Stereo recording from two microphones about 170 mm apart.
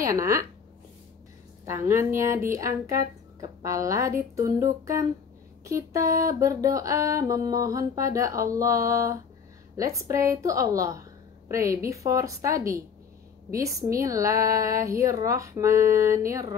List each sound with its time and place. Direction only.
0.0 s speech: 20° right (ahead or behind)
1.7 s speech: 15° right (ahead or behind)
5.7 s music: 20° right (ahead or behind)